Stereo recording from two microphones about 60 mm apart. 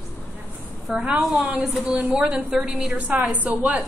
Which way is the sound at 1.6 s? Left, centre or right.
Centre.